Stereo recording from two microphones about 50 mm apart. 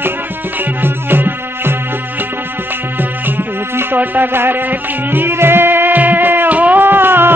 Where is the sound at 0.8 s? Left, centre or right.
Right.